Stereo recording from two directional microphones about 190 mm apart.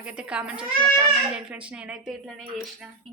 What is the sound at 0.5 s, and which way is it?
Speech, 25° right (ahead or behind).